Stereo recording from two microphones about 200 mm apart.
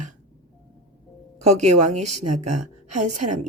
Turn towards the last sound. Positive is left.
turn(degrees=-35)  # may be behind; listen again after turning